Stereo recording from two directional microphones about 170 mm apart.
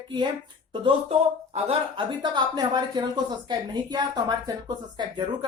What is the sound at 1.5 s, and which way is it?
Speech, 30° right (ahead or behind).